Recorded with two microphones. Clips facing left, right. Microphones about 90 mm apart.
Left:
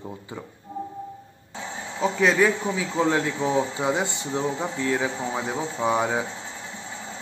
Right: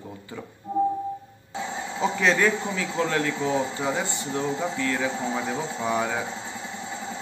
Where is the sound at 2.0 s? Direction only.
5° left (ahead or behind); by 6.2 s 20° left (ahead or behind).